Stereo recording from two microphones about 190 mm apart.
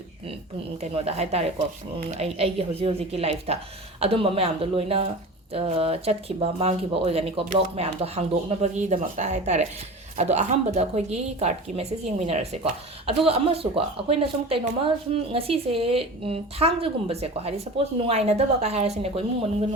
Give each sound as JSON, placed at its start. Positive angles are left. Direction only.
{"t": 0.8, "sound": "a woman's voice", "side_deg": -35}